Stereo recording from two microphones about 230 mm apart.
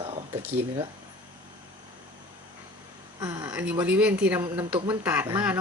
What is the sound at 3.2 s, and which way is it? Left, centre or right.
Speech, centre.